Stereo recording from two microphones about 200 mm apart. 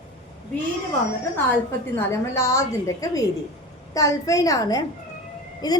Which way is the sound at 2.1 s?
15° left (ahead or behind).